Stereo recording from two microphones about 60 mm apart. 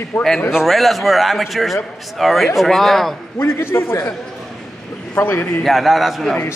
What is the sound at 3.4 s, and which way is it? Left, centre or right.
Speech, left.